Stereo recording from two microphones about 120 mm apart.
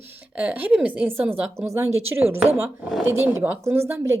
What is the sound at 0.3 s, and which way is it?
A woman's voice, 15° right (ahead or behind).